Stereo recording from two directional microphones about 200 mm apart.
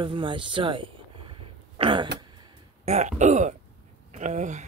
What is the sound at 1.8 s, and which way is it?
Throat clearing, 25° right (ahead or behind).